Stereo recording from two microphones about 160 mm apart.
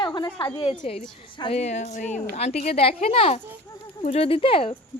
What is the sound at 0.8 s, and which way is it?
A woman's voice, 40° left (ahead or behind).